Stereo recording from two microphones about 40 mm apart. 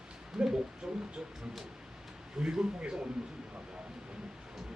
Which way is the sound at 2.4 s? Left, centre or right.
Right.